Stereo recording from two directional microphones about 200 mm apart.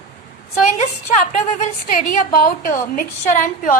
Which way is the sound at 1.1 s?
35° left (ahead or behind).